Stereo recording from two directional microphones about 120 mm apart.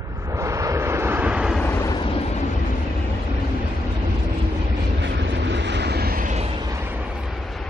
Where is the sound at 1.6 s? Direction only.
20° left (ahead or behind).